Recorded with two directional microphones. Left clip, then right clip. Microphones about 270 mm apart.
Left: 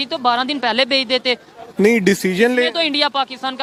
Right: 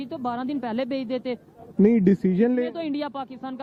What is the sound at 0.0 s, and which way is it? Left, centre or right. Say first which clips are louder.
Speech: left 12 dB; centre.